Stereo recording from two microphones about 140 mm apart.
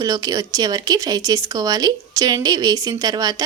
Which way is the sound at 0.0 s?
25° right (ahead or behind).